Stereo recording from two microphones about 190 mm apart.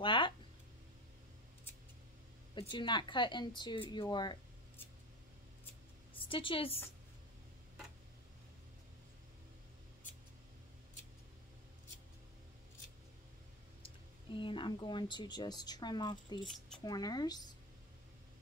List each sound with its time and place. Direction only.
0.0 s a sound: 25° left (ahead or behind)
2.5 s a woman's voice: 25° left (ahead or behind)
6.2 s a woman's voice: 25° left (ahead or behind)
13.8 s a woman's voice: 25° left (ahead or behind)